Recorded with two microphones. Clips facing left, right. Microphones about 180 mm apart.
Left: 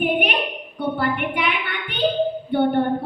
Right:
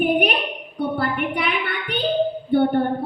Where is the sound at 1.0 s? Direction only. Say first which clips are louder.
Even; 35° right (ahead or behind).